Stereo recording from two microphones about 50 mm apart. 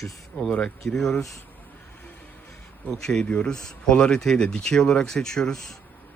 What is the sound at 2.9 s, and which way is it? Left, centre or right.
Speech, centre.